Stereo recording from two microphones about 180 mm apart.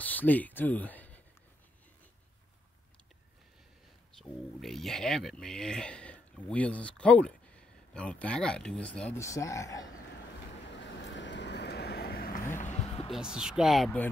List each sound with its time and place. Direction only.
0.0 s speech: 10° left (ahead or behind)
4.2 s speech: centre (ahead or behind); by 9.8 s 15° left (ahead or behind)
10.5 s vehicle: 80° left; by 12.4 s 55° left (ahead or behind)
12.5 s music: 40° left (ahead or behind)
13.1 s speech: 5° right (ahead or behind)
13.8 s speech: 10° left (ahead or behind)